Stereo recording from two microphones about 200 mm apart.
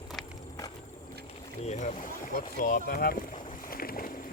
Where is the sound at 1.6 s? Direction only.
35° left (ahead or behind).